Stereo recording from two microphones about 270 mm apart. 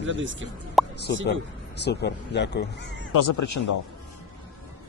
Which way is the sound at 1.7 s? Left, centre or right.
Left.